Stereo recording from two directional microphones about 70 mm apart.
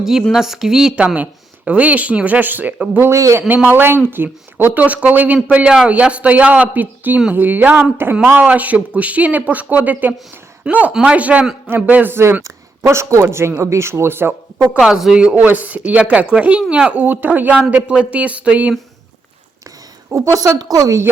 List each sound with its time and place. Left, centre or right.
0.0 s a woman's voice: centre
0.9 s speech: centre
2.7 s speech: centre
3.0 s a woman's voice: right
3.7 s speech: right
14.8 s a woman's voice: centre
15.2 s speech: centre
20.1 s a woman's voice: right